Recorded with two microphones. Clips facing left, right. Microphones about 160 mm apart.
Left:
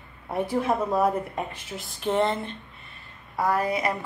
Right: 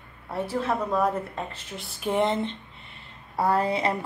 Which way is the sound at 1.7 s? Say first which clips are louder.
Left 1 dB; centre (ahead or behind).